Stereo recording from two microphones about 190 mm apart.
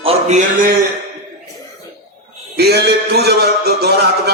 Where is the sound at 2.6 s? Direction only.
60° right (ahead or behind).